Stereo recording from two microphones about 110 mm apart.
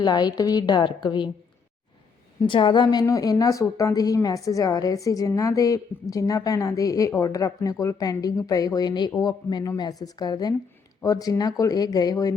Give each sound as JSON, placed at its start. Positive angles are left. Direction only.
{"t": 0.0, "sound": "a woman's voice", "side_deg": 40}
{"t": 2.5, "sound": "a woman's voice", "side_deg": 50}